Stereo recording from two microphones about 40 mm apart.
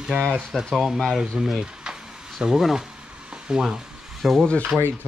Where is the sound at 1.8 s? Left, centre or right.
Centre.